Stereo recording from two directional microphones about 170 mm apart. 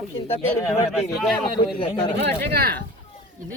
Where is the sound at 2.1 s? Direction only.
75° right (ahead or behind).